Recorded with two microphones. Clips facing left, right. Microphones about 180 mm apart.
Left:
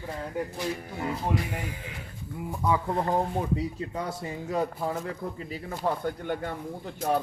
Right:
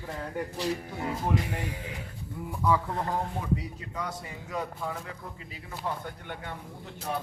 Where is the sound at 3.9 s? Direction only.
30° left (ahead or behind).